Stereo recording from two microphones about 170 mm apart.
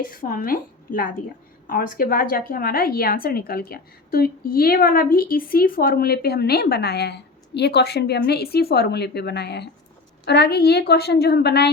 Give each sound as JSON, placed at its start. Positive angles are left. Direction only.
{"t": 0.0, "sound": "a woman's voice", "side_deg": 55}